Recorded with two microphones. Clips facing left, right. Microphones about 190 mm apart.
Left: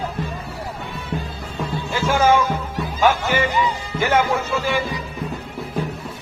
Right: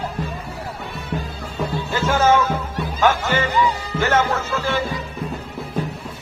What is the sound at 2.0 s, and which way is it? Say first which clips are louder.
Music: even; 10° left (ahead or behind).